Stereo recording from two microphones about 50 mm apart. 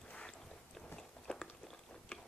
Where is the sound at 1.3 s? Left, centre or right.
Centre.